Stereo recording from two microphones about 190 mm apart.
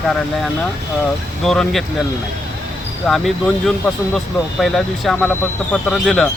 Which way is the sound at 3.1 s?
Centre (ahead or behind).